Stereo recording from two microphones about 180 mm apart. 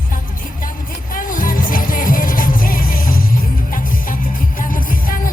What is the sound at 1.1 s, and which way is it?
Music, 50° left (ahead or behind).